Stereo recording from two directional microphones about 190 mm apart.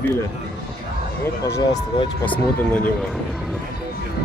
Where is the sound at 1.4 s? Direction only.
15° left (ahead or behind).